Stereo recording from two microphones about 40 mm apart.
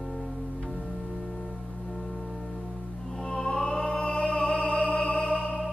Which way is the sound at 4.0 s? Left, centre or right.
Left.